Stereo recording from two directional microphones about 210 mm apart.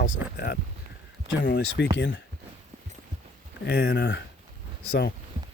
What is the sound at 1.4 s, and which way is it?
Speech, 60° left (ahead or behind).